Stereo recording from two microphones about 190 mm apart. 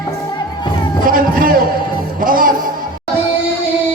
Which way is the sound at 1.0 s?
45° right (ahead or behind).